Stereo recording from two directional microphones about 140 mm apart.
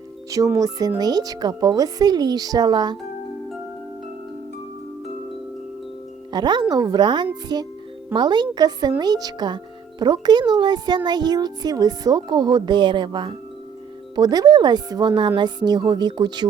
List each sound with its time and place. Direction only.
0.3 s speech: 25° right (ahead or behind)
6.3 s a child's voice: 30° right (ahead or behind)